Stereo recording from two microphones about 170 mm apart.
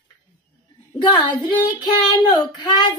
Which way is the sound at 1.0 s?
25° left (ahead or behind).